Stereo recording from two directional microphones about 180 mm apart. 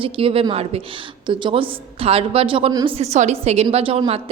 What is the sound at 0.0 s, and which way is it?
A woman's voice, 30° right (ahead or behind).